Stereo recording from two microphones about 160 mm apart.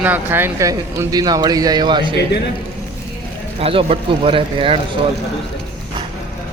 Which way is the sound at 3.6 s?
35° right (ahead or behind).